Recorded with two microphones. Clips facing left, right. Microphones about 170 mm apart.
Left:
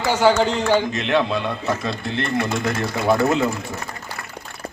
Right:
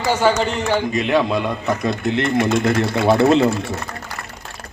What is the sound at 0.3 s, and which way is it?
A man's voice, 10° right (ahead or behind).